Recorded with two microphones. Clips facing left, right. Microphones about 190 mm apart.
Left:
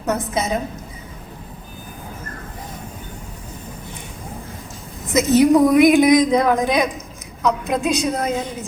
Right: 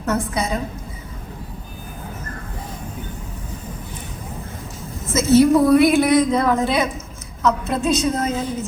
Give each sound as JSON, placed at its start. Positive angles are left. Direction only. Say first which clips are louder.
{"t": 0.0, "sound": "a woman's voice", "louder": "even", "side_deg": 20}
{"t": 5.0, "sound": "a woman's voice", "louder": "even", "side_deg": 15}